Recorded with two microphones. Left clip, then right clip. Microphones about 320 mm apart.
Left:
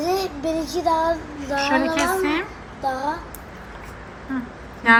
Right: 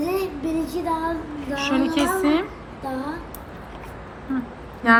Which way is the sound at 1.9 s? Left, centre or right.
Centre.